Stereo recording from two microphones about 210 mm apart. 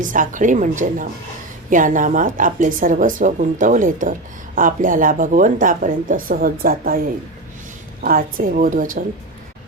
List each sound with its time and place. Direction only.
0.0 s a woman's voice: 40° right (ahead or behind)
8.0 s a woman's voice: 40° right (ahead or behind)